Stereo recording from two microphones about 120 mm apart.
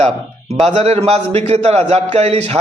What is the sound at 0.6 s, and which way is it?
A man's voice, 65° right (ahead or behind).